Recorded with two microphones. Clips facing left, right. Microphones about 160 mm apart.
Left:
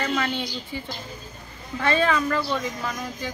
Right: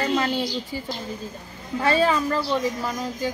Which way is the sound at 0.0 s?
30° right (ahead or behind).